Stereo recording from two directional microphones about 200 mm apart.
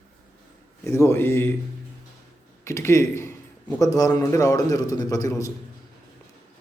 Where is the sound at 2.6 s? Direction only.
15° left (ahead or behind).